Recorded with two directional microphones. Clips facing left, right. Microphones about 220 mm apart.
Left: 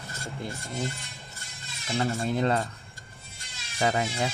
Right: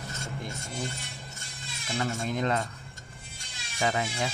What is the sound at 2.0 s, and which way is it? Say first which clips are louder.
Speech: left 3 dB; 35° left (ahead or behind).